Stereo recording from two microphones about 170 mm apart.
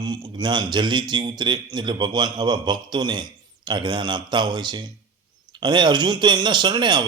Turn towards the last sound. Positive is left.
turn(degrees=-25)  # may be behind; listen again after turning